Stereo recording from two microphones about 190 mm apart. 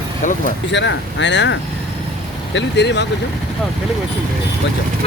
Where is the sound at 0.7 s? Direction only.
70° left (ahead or behind).